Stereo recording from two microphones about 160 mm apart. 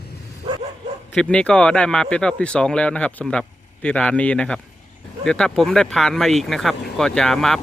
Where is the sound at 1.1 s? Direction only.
5° left (ahead or behind).